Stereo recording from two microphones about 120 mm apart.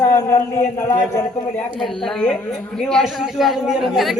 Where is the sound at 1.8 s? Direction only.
5° left (ahead or behind).